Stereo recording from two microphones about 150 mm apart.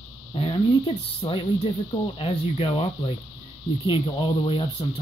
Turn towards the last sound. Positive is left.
turn(degrees=40)  # may be behind; listen again after turning